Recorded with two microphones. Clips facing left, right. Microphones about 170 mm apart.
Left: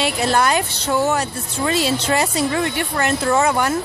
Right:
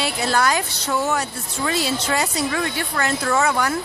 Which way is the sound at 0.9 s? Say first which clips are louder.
Left 4 dB; 30° left (ahead or behind).